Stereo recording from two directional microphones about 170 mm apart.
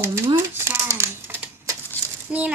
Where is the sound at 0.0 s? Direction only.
15° right (ahead or behind).